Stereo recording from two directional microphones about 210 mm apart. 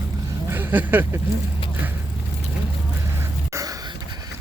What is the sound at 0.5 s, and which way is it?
Speech, 10° right (ahead or behind).